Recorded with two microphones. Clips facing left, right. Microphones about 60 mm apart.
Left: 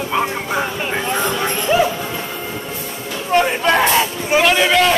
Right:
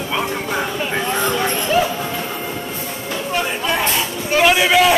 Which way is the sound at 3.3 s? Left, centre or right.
Left.